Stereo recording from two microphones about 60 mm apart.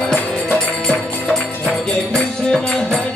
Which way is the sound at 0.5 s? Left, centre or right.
Centre.